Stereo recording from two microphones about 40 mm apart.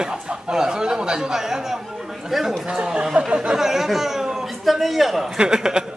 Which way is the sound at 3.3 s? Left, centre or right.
Right.